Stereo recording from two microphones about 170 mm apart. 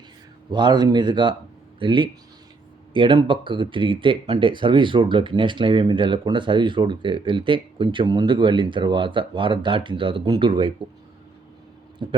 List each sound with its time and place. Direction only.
0.5 s speech: 25° right (ahead or behind)
12.0 s speech: 25° right (ahead or behind)